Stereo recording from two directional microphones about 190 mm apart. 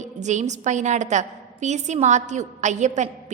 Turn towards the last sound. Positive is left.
turn(degrees=-40)  # may be behind; listen again after turning